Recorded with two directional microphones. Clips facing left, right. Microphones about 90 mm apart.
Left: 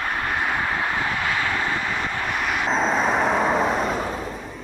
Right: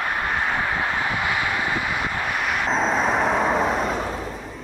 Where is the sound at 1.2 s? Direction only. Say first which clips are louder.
Even; 15° right (ahead or behind).